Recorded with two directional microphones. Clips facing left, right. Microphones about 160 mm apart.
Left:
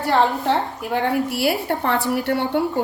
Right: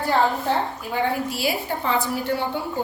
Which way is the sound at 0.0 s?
75° left (ahead or behind).